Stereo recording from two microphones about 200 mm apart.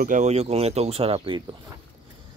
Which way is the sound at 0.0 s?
40° right (ahead or behind).